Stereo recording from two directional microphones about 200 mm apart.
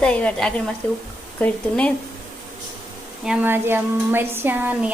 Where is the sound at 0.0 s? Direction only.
5° left (ahead or behind).